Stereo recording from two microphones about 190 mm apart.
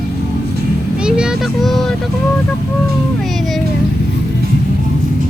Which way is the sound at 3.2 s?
Centre (ahead or behind).